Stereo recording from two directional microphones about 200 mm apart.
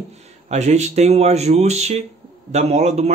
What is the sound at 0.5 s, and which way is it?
A man's voice, 35° right (ahead or behind).